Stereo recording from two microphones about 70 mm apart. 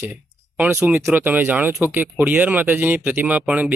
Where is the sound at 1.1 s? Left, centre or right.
Right.